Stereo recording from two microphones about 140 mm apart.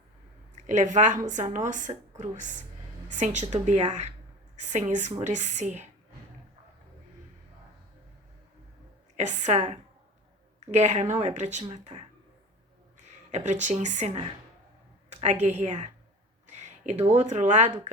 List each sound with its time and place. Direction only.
0.5 s speech: 60° right (ahead or behind)
9.1 s speech: 55° right (ahead or behind)
13.3 s speech: 60° right (ahead or behind)
15.1 s speech: 55° right (ahead or behind)